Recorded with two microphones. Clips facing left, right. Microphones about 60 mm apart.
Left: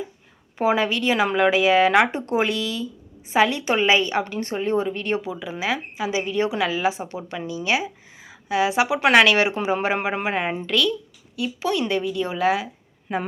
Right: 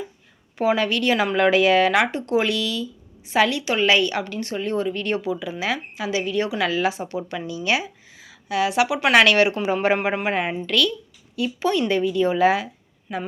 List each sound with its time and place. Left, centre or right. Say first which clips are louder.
0.6 s a woman's voice: even; centre
1.9 s speech: left 1 dB; left
8.2 s a woman's voice: left 1 dB; left
9.1 s a woman's voice: right 1 dB; centre
9.5 s speech: even; left
9.8 s a woman's voice: right 2 dB; centre
13.1 s speech: left 3 dB; left